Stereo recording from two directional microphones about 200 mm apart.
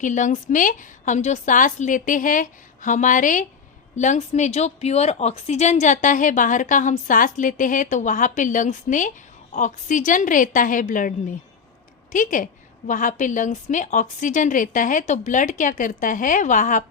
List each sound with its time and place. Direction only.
0.0 s a woman's voice: 40° left (ahead or behind)